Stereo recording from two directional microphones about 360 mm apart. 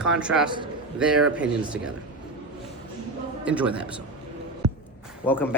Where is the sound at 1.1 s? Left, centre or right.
Centre.